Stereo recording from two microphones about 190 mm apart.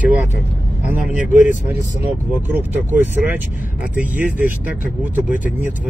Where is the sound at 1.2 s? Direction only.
40° left (ahead or behind).